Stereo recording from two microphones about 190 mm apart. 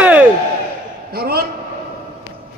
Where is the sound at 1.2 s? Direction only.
55° right (ahead or behind).